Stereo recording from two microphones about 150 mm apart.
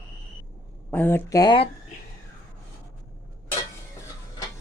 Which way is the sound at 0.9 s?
15° left (ahead or behind).